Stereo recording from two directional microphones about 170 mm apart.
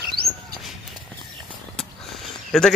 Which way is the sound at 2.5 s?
5° left (ahead or behind).